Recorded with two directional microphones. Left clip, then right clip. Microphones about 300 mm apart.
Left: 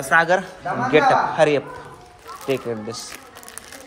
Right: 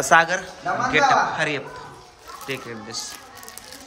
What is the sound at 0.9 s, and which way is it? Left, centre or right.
Speech, centre.